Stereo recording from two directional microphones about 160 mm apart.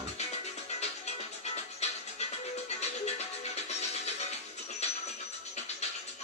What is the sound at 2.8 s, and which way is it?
Music, 45° left (ahead or behind).